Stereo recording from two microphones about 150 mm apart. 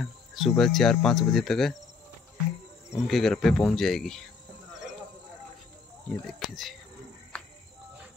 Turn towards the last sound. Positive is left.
turn(degrees=0)  # may be behind; listen again after turning